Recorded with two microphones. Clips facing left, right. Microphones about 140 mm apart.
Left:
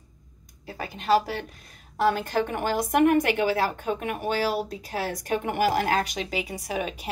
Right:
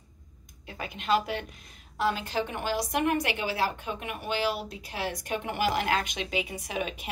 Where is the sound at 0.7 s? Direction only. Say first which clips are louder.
Left 4 dB; 35° left (ahead or behind).